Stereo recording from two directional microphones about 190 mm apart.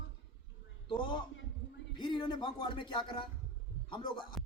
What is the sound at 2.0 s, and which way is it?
A man's voice, 25° left (ahead or behind).